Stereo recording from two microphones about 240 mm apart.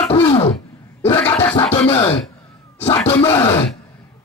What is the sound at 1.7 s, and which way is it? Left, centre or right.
Speech, left.